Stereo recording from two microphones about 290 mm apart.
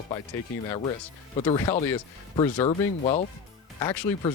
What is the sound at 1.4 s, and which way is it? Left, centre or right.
Speech, centre.